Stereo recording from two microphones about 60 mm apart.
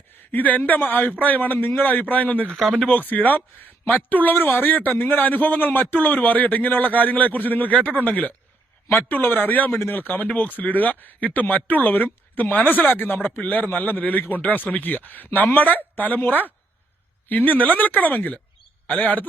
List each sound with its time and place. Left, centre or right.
0.3 s speech: left
2.5 s speech: centre
3.1 s speech: left